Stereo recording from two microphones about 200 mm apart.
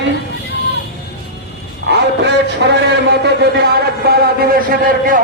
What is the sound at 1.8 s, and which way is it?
A man's voice, 60° right (ahead or behind).